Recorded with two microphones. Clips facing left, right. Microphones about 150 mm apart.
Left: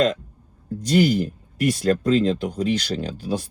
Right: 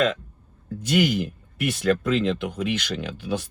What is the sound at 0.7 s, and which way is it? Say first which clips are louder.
Speech: left 3 dB; 35° left (ahead or behind).